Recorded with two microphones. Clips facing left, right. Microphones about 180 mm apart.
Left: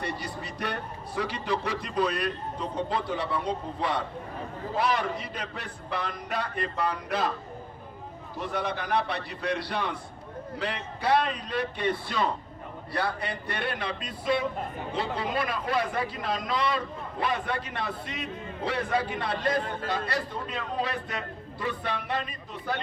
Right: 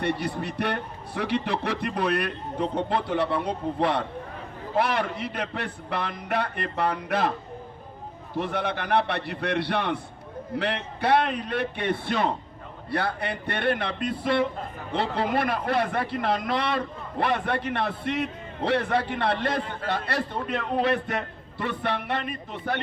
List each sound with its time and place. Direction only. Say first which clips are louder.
0.0 s a man's voice: right 7 dB; 60° right (ahead or behind)
8.4 s a man's voice: right 3 dB; 60° right (ahead or behind)